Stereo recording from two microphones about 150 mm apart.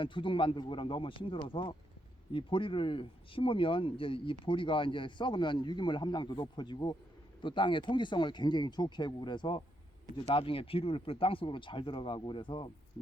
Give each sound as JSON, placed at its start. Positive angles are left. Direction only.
{"t": 0.0, "sound": "speech", "side_deg": 35}